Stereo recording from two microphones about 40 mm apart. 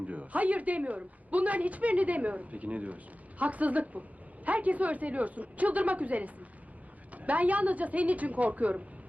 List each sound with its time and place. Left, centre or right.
0.1 s a woman's voice: right